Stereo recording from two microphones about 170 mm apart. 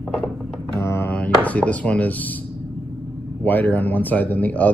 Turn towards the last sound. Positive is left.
turn(degrees=10)  # may be behind; listen again after turning